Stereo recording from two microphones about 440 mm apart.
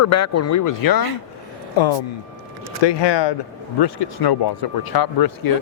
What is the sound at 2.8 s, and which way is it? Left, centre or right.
Speech, left.